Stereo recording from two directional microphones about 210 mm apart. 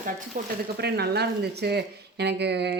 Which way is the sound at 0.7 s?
50° right (ahead or behind).